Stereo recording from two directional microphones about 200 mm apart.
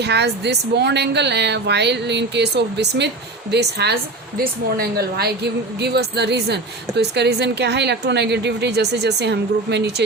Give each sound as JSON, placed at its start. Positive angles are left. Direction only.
{"t": 0.0, "sound": "a woman's voice", "side_deg": -55}